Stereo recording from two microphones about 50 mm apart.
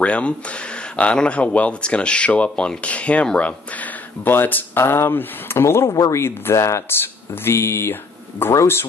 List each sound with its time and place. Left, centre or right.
0.0 s speech: left
4.7 s speech: left
6.9 s speech: left